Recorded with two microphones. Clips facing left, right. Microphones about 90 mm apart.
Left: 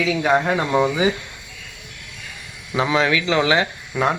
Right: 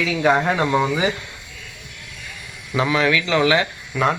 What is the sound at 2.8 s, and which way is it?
Speech, 20° left (ahead or behind).